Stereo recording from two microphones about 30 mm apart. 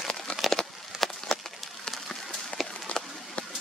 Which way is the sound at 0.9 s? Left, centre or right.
Right.